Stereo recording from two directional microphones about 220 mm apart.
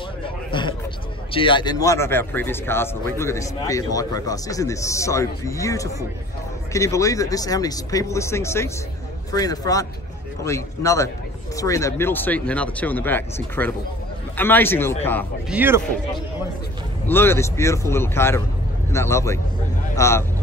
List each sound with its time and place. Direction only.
0.2 s a sound: 20° left (ahead or behind)
1.3 s a man's voice: 20° left (ahead or behind)
15.5 s a man's voice: 10° right (ahead or behind)
17.1 s a man's voice: 10° left (ahead or behind)